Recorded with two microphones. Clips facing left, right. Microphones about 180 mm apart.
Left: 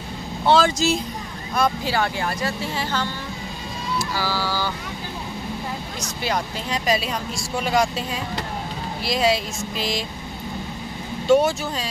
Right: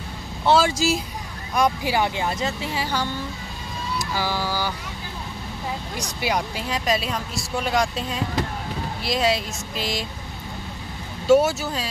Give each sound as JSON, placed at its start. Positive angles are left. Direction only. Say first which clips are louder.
{"t": 0.5, "sound": "speech", "louder": "left 1 dB", "side_deg": -10}
{"t": 5.9, "sound": "speech", "louder": "even", "side_deg": -15}
{"t": 6.7, "sound": "speech", "louder": "left 1 dB", "side_deg": 0}
{"t": 11.2, "sound": "speech", "louder": "even", "side_deg": -5}